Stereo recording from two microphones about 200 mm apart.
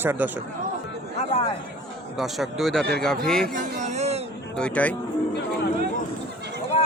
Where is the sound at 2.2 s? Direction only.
Centre (ahead or behind).